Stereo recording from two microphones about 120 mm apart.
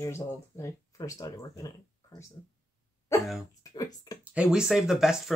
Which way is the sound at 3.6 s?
30° left (ahead or behind).